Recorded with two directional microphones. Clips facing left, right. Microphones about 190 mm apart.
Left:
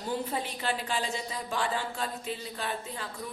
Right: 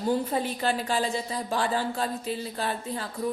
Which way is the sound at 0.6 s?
40° right (ahead or behind).